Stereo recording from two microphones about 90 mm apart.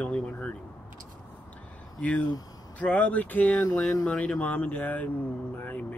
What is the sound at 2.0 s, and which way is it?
Speech, 15° left (ahead or behind).